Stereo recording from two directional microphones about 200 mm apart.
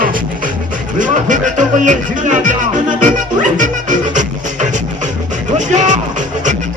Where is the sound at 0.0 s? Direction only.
45° right (ahead or behind).